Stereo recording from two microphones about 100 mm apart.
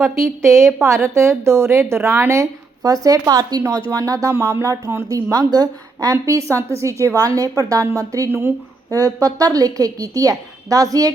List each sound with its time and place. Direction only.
0.5 s a woman's voice: 25° right (ahead or behind)
8.3 s a woman's voice: 20° right (ahead or behind)
9.2 s a woman's voice: 35° right (ahead or behind)